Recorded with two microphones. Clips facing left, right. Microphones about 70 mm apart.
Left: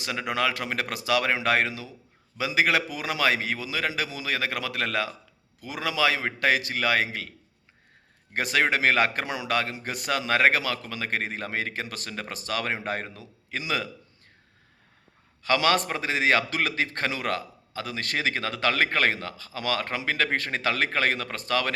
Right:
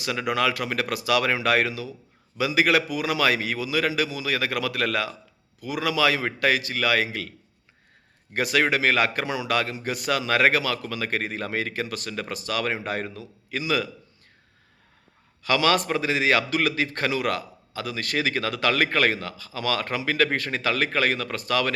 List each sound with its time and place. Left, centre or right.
0.3 s a man's voice: left
5.5 s a man's voice: left
5.8 s a man's voice: left
8.3 s a man's voice: left
9.5 s a man's voice: left
15.4 s a man's voice: left